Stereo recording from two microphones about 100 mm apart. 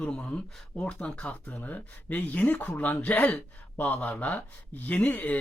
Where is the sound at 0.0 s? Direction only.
10° left (ahead or behind).